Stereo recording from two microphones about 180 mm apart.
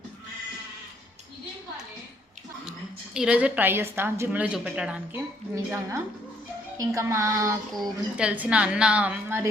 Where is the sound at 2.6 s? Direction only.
5° right (ahead or behind).